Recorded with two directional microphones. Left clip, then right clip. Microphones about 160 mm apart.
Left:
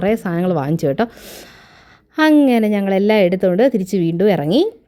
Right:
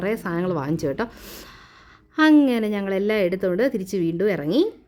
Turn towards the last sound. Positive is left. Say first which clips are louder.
# left 6 dB
turn(degrees=35)  # may be behind; listen again after turning